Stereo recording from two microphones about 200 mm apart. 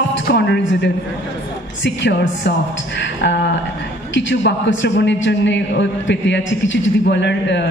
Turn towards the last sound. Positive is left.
turn(degrees=60)  # may be behind; listen again after turning